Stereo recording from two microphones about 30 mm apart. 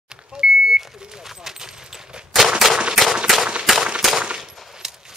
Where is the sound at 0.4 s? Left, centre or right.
Right.